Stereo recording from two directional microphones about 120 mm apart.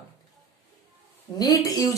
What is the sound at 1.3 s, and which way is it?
Speech, 30° left (ahead or behind).